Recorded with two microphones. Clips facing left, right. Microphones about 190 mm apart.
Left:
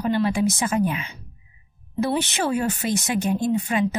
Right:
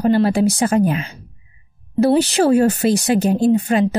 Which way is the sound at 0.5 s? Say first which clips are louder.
Right 6 dB; 60° right (ahead or behind).